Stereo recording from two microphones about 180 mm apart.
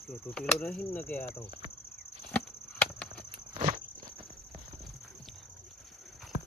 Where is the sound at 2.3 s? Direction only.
10° left (ahead or behind).